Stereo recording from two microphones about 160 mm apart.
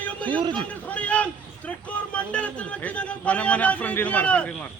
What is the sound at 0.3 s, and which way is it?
Speech, 30° right (ahead or behind).